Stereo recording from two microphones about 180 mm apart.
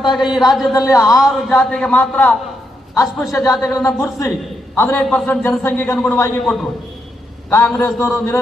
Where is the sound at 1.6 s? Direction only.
5° left (ahead or behind).